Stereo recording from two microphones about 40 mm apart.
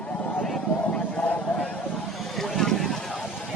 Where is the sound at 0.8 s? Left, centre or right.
Left.